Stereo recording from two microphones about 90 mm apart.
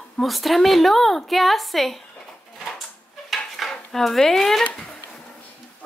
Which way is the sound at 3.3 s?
Centre (ahead or behind).